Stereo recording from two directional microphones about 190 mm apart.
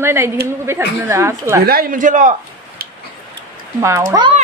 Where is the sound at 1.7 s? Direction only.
50° right (ahead or behind).